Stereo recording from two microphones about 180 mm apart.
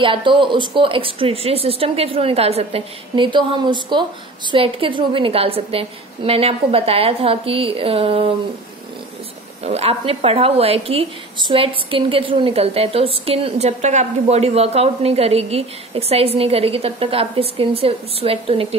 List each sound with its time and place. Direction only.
0.0 s a woman's voice: 30° right (ahead or behind)
9.6 s a woman's voice: 35° right (ahead or behind)